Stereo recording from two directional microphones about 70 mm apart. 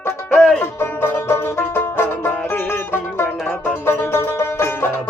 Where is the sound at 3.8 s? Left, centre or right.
Left.